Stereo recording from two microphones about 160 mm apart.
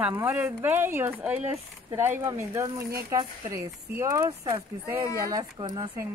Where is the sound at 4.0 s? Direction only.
20° right (ahead or behind).